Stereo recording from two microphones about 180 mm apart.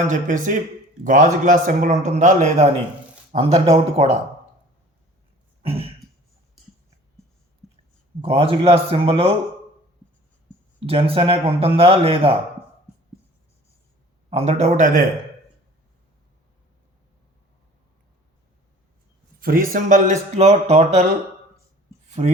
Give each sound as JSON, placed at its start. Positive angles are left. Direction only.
{"t": 0.1, "sound": "a man's voice", "side_deg": -45}
{"t": 5.6, "sound": "a sound", "side_deg": -30}
{"t": 8.2, "sound": "a man's voice", "side_deg": -30}
{"t": 10.8, "sound": "a man's voice", "side_deg": -30}
{"t": 14.3, "sound": "a man's voice", "side_deg": -35}
{"t": 19.4, "sound": "speech", "side_deg": -55}